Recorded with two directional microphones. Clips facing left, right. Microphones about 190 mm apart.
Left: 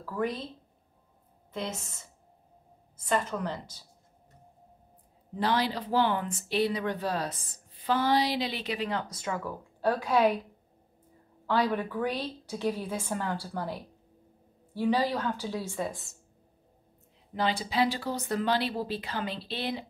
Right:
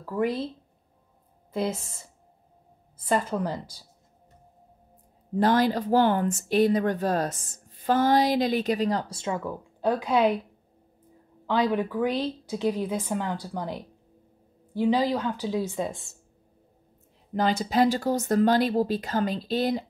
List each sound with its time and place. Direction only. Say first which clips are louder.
0.0 s a woman's voice: right 5 dB; 25° right (ahead or behind)
1.5 s speech: right 7 dB; 35° right (ahead or behind)
5.3 s speech: right 7 dB; 45° right (ahead or behind); by 10.3 s 15° right (ahead or behind)
11.4 s a woman's voice: right 3 dB; 10° right (ahead or behind)
17.3 s speech: right 5 dB; 45° right (ahead or behind)